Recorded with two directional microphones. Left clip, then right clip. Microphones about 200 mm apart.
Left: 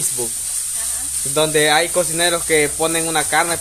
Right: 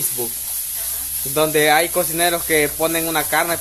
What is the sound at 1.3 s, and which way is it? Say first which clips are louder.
Speech: even; centre (ahead or behind).